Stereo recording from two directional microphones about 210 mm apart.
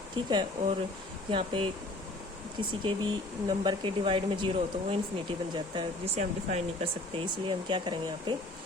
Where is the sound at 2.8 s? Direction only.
25° right (ahead or behind).